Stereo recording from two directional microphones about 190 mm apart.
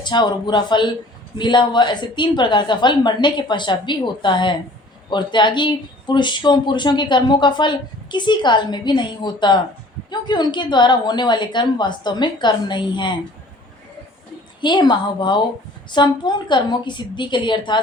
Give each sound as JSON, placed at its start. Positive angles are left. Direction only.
{"t": 0.0, "sound": "speech", "side_deg": 25}
{"t": 14.6, "sound": "speech", "side_deg": 25}